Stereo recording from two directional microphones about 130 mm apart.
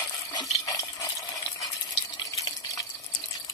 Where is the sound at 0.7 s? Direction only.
25° left (ahead or behind).